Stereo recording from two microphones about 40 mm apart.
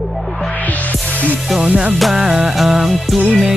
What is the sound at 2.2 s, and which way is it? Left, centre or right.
Music, centre.